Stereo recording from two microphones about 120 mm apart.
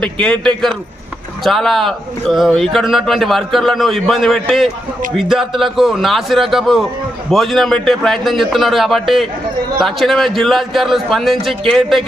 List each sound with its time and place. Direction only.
0.0 s a man's voice: 5° left (ahead or behind)